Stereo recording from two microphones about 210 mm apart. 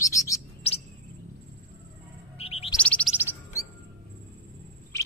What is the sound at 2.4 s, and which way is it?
Bird, 30° left (ahead or behind).